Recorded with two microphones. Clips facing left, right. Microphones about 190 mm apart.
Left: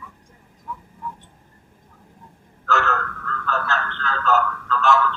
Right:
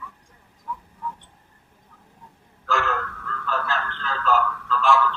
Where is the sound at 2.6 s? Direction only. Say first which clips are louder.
Left 2 dB; 10° right (ahead or behind).